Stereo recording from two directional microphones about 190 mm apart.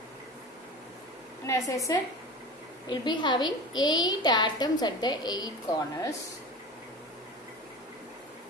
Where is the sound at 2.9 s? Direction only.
25° left (ahead or behind).